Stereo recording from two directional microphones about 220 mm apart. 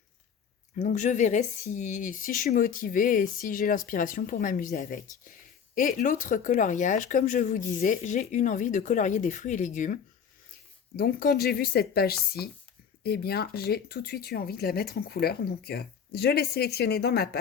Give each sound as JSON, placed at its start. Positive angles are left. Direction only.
{"t": 0.8, "sound": "speech", "side_deg": 35}